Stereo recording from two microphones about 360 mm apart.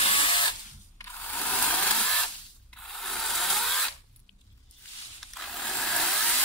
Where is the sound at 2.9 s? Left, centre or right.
Centre.